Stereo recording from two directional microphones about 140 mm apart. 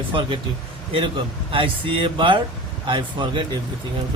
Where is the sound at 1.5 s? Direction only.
40° right (ahead or behind).